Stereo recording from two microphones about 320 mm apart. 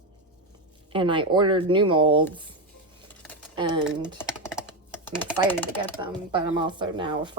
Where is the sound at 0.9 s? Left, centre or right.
Centre.